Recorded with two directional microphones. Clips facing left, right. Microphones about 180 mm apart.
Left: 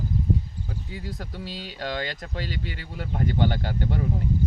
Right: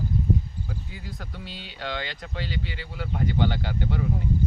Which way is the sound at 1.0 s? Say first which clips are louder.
Left 4 dB; 40° left (ahead or behind).